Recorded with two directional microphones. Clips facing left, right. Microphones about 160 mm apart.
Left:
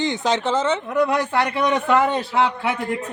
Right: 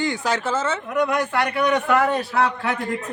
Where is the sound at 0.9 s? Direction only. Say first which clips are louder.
Left 2 dB; 30° left (ahead or behind).